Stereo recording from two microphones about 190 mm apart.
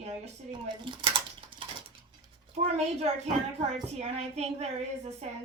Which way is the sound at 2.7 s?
35° right (ahead or behind).